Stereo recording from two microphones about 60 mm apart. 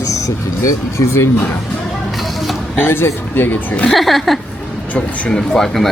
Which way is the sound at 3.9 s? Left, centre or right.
Centre.